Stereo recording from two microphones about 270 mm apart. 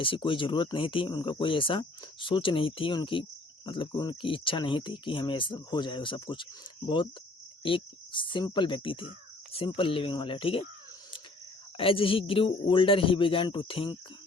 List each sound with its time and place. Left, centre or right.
0.0 s speech: centre
11.8 s speech: centre